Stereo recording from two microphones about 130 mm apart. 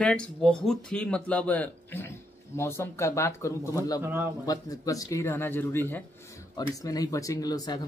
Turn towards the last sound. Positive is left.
turn(degrees=30)  # may be behind; listen again after turning